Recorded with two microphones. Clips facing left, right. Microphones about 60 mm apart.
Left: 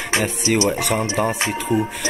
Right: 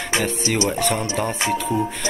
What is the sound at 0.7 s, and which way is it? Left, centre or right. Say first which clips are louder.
Speech: left 1 dB; centre.